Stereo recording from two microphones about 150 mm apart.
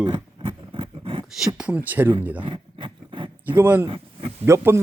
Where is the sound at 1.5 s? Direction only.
10° right (ahead or behind).